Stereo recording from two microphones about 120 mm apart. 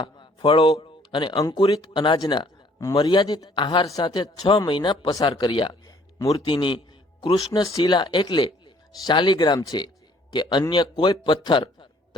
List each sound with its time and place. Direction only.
0.0 s a man's voice: 40° left (ahead or behind)
1.4 s speech: 30° left (ahead or behind)
1.7 s a man's voice: 40° left (ahead or behind)
7.3 s speech: 30° left (ahead or behind)